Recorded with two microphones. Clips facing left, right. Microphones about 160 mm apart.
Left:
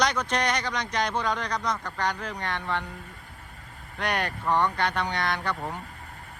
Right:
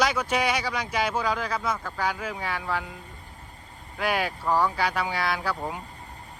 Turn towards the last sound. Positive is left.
turn(degrees=-5)  # may be behind; listen again after turning